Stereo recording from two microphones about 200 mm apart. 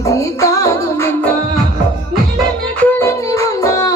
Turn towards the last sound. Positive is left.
turn(degrees=15)  # may be behind; listen again after turning